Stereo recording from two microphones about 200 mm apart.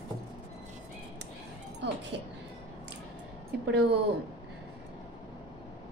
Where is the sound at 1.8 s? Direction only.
60° right (ahead or behind).